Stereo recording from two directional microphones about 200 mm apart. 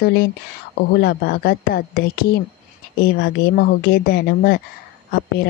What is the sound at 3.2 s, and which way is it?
Speech, 50° left (ahead or behind).